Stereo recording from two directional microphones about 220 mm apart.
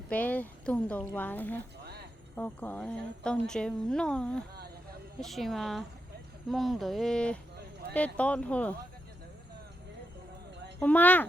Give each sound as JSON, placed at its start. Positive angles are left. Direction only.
{"t": 0.1, "sound": "speech", "side_deg": 5}
{"t": 1.8, "sound": "a sound", "side_deg": -45}
{"t": 2.3, "sound": "speech", "side_deg": 10}
{"t": 10.8, "sound": "speech", "side_deg": 10}